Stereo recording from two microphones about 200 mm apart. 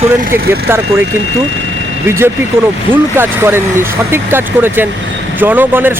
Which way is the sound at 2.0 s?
10° right (ahead or behind).